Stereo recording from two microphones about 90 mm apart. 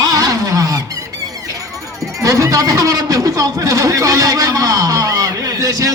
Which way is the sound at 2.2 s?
40° right (ahead or behind).